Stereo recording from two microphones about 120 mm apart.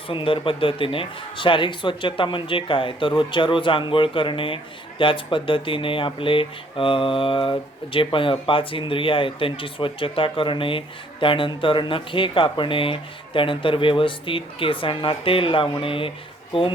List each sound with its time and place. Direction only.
0.1 s speech: 45° left (ahead or behind)